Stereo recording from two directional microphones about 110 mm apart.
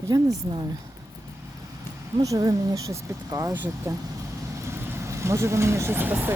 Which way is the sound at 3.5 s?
15° right (ahead or behind).